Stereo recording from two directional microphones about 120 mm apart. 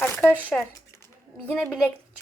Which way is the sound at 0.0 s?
20° left (ahead or behind).